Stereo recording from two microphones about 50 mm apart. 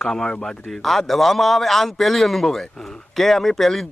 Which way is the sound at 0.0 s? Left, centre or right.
Centre.